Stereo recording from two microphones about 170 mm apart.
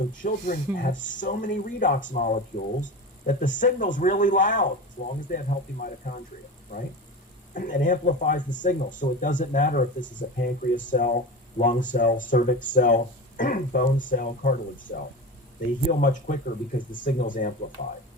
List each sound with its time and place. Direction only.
0.1 s speech: 50° left (ahead or behind)
7.5 s speech: 50° left (ahead or behind)